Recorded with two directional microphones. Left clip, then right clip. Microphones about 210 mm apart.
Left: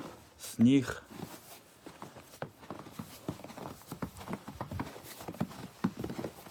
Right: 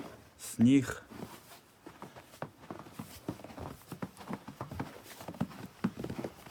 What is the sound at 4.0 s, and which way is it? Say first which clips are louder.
Horse: left 1 dB; 45° left (ahead or behind).